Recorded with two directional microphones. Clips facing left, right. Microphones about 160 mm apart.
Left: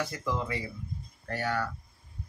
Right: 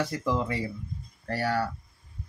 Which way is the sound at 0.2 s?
30° right (ahead or behind).